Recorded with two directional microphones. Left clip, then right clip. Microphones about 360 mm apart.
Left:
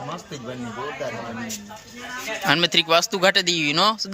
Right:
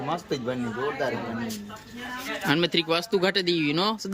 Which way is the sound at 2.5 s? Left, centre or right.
Centre.